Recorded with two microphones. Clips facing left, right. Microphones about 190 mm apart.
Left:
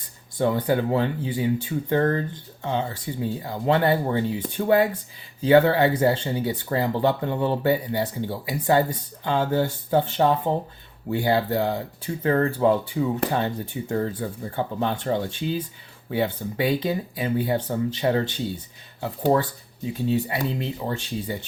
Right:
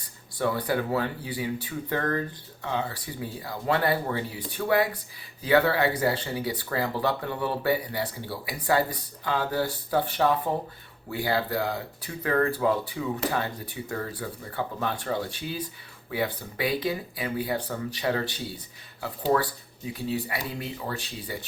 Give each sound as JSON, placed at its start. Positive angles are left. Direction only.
{"t": 0.3, "sound": "speech", "side_deg": 25}
{"t": 19.9, "sound": "speech", "side_deg": 25}